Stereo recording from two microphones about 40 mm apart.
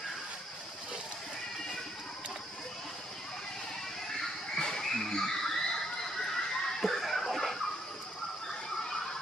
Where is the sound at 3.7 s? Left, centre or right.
Centre.